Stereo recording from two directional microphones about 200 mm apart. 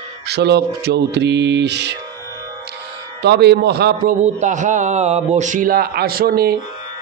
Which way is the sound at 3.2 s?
55° right (ahead or behind).